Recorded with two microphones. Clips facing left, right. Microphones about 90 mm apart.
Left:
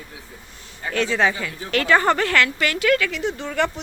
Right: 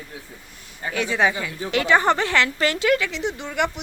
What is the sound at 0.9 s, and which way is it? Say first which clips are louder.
A woman's voice: left 1 dB; 10° right (ahead or behind).